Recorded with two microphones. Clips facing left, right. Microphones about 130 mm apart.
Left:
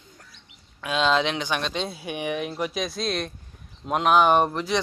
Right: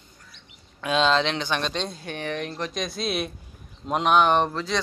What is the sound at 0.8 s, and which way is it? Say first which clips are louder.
Speech: right 1 dB; 5° left (ahead or behind).